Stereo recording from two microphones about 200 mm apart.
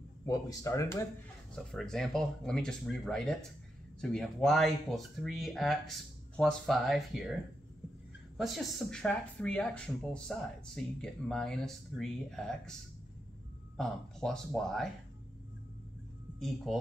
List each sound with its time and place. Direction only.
0.2 s speech: 15° left (ahead or behind)
1.5 s speech: 5° left (ahead or behind)
8.4 s speech: centre (ahead or behind)
13.7 s speech: centre (ahead or behind)
16.3 s speech: centre (ahead or behind)